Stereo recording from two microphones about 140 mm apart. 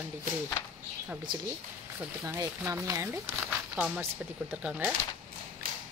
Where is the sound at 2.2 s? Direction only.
20° right (ahead or behind).